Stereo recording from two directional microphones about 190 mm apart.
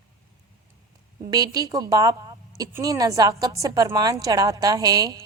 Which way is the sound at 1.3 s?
20° right (ahead or behind).